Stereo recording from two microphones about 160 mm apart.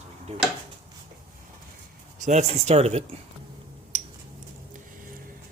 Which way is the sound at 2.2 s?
45° right (ahead or behind).